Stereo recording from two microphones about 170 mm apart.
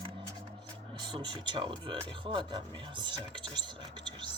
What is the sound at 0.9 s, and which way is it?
Speech, 30° right (ahead or behind).